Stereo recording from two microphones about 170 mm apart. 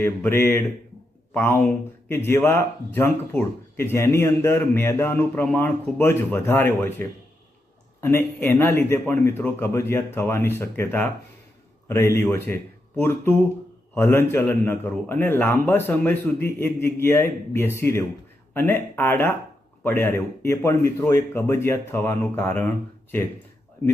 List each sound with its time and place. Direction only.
0.0 s speech: 10° left (ahead or behind)
8.0 s speech: 15° left (ahead or behind)